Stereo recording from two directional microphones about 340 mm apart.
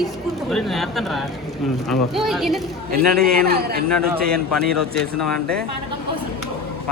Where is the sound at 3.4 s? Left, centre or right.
Right.